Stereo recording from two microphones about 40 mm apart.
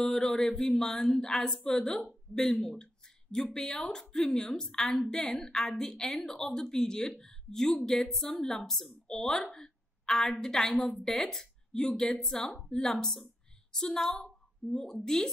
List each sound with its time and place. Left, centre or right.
0.0 s a woman's voice: centre
2.6 s a sound: centre
3.5 s a woman's voice: centre